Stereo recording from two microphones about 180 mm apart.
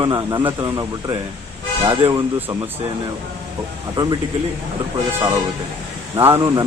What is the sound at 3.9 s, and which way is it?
Speech, 25° right (ahead or behind).